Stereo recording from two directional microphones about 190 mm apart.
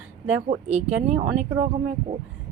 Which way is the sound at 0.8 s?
35° right (ahead or behind).